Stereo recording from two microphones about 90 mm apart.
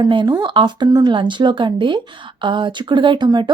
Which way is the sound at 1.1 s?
60° right (ahead or behind).